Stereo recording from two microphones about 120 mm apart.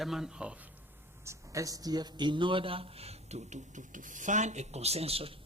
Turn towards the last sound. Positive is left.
turn(degrees=-55)  # may be behind; listen again after turning